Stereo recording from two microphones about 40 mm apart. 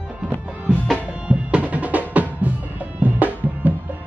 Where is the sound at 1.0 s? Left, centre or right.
Right.